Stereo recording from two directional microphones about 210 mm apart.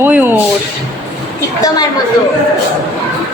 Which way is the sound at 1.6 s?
20° left (ahead or behind).